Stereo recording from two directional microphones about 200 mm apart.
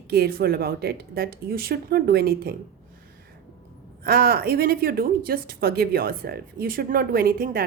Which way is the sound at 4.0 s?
50° right (ahead or behind).